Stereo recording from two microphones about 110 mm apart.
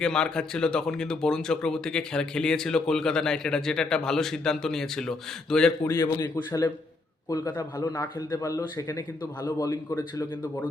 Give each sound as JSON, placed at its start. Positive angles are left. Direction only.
{"t": 0.0, "sound": "speech", "side_deg": 5}
{"t": 5.8, "sound": "a man's voice", "side_deg": 30}
{"t": 9.9, "sound": "speech", "side_deg": 20}